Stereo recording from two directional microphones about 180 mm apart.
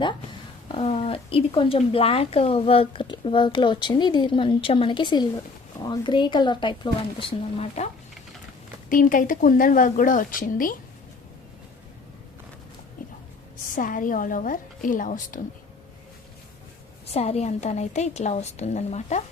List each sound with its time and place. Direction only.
0.7 s speech: 35° left (ahead or behind)
8.9 s speech: 50° left (ahead or behind)
13.7 s speech: 50° left (ahead or behind)
17.2 s a woman's voice: 35° left (ahead or behind)